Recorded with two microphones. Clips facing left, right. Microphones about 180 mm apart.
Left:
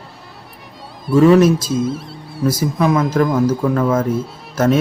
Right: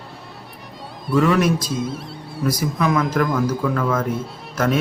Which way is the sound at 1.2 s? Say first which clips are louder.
Left 7 dB; 30° left (ahead or behind).